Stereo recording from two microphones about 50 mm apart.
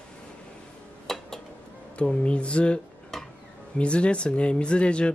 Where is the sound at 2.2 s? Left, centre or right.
Left.